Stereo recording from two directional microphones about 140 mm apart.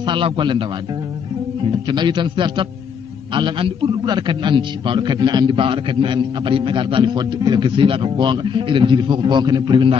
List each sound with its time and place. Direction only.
0.0 s a man's voice: 35° right (ahead or behind)